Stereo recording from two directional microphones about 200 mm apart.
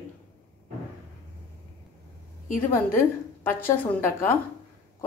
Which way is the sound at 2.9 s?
10° left (ahead or behind).